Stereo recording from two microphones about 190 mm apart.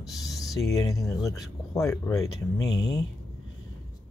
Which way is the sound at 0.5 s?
15° left (ahead or behind).